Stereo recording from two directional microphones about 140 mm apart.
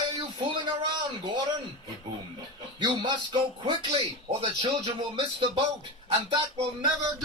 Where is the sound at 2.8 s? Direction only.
35° right (ahead or behind).